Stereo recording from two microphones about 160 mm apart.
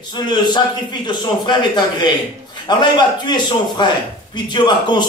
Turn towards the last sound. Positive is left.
turn(degrees=25)  # may be behind; listen again after turning